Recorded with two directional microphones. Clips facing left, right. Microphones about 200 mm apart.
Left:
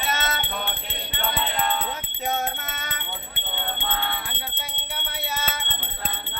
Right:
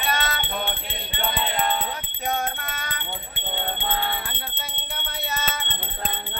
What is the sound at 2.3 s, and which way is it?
Music, 20° left (ahead or behind).